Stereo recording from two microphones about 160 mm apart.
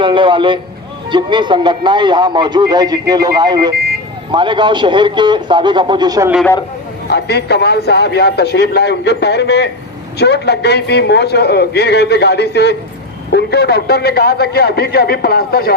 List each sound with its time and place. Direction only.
0.0 s a man's voice: 30° right (ahead or behind)
7.1 s a man's voice: 90° left; by 15.7 s 70° left (ahead or behind)